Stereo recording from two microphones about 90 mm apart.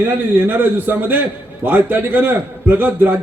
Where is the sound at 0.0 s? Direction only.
20° right (ahead or behind).